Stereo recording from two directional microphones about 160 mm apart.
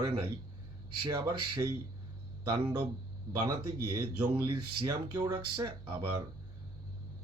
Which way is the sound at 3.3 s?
25° right (ahead or behind).